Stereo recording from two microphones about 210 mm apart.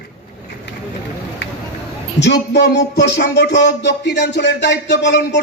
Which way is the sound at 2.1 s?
55° left (ahead or behind).